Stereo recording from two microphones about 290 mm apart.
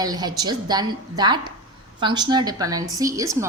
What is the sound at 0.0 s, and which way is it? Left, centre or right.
A woman's voice, centre.